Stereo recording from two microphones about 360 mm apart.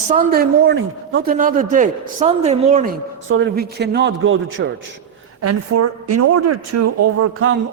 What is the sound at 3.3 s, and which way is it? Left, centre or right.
A man's voice, right.